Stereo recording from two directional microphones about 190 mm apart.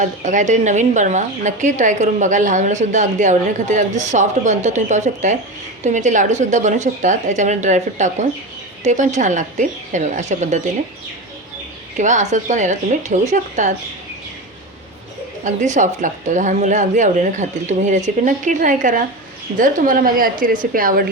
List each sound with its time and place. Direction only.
0.0 s a woman's voice: 40° right (ahead or behind)
11.9 s a woman's voice: 40° right (ahead or behind)
15.4 s a woman's voice: 40° right (ahead or behind)